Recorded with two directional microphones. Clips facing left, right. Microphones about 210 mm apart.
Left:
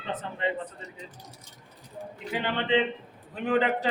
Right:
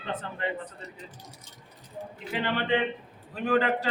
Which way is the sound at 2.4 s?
20° left (ahead or behind).